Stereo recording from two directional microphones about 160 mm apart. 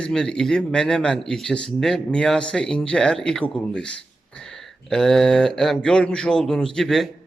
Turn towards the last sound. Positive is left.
turn(degrees=0)  # may be behind; listen again after turning